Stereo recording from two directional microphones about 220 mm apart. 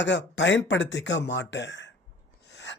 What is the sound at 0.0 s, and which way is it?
A man's voice, 50° left (ahead or behind).